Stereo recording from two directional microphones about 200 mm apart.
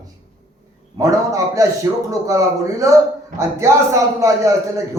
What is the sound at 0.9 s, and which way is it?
A man's voice, 15° right (ahead or behind).